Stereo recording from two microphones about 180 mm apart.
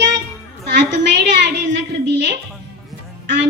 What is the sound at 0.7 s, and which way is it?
A child's voice, 75° right (ahead or behind).